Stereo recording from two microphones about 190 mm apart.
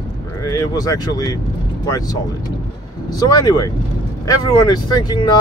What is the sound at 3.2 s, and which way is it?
Speech, 20° left (ahead or behind).